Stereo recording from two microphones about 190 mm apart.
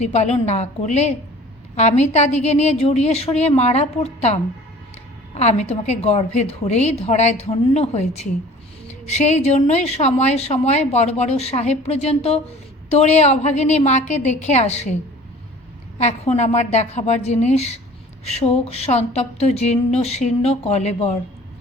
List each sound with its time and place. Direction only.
0.0 s a woman's voice: 35° left (ahead or behind)
5.4 s a woman's voice: 35° left (ahead or behind)
16.0 s a woman's voice: 35° left (ahead or behind)